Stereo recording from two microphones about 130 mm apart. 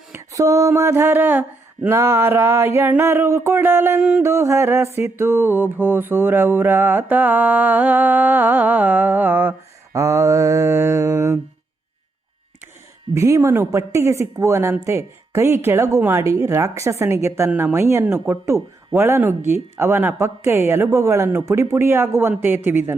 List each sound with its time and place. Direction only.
0.1 s mantra: 25° right (ahead or behind)
9.9 s speech: 25° right (ahead or behind)
13.1 s speech: 20° right (ahead or behind)